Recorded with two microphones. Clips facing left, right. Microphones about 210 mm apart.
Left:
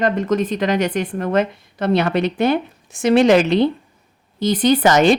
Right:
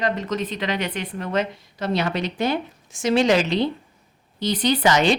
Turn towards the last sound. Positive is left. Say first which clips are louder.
# left 5 dB
turn(degrees=50)  # may be behind; listen again after turning